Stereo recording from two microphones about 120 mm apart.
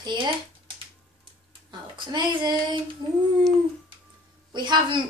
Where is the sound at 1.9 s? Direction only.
40° right (ahead or behind).